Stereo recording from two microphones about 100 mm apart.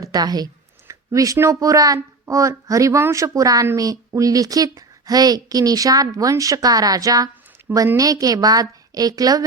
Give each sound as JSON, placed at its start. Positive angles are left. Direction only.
{"t": 0.0, "sound": "speech", "side_deg": -40}